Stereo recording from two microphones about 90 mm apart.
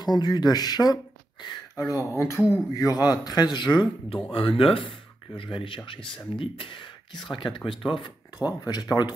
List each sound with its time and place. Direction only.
0.0 s speech: 50° left (ahead or behind)
1.8 s speech: 35° left (ahead or behind)
2.7 s speech: 45° left (ahead or behind)
4.3 s speech: 90° left; by 8.1 s 70° left (ahead or behind)
8.4 s speech: 45° left (ahead or behind)